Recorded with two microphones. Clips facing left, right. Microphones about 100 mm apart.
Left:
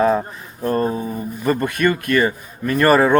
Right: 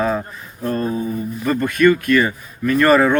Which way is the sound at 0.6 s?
35° left (ahead or behind).